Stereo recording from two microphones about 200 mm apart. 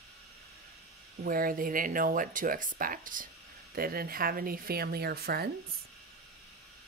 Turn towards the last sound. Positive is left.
turn(degrees=-50)  # may be behind; listen again after turning